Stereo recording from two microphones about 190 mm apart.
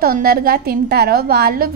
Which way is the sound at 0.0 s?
50° right (ahead or behind).